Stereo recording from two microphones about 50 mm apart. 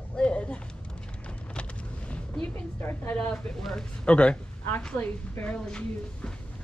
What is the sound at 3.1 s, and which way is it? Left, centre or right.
Speech, left.